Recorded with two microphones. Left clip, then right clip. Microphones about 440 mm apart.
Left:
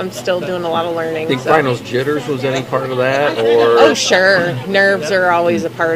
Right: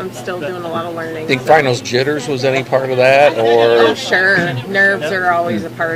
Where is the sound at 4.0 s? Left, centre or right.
Left.